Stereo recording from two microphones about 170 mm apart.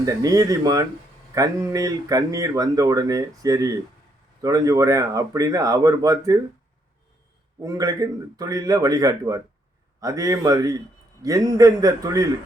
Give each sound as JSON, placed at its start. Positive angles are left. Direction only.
{"t": 0.0, "sound": "speech", "side_deg": -20}
{"t": 7.6, "sound": "speech", "side_deg": -20}